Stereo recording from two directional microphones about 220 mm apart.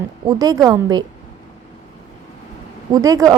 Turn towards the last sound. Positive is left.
turn(degrees=-15)  # may be behind; listen again after turning